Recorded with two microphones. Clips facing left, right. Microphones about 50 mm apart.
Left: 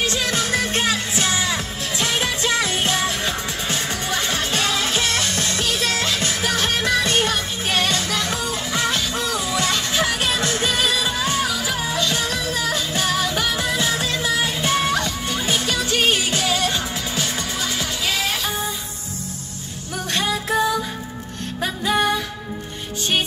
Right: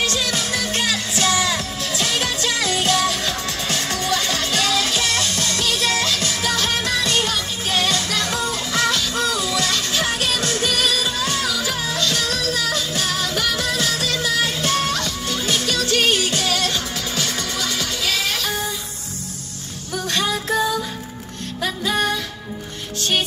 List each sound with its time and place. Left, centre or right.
0.2 s music: left
11.2 s music: centre
19.9 s a sound: centre
21.5 s music: left